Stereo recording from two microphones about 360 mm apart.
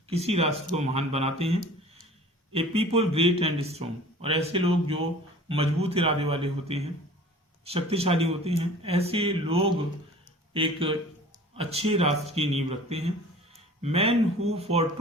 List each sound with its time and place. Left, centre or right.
0.1 s a man's voice: centre